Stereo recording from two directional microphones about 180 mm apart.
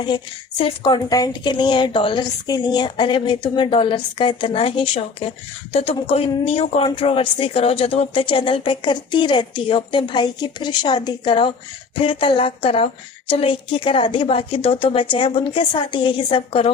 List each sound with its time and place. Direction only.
0.0 s speech: 25° left (ahead or behind)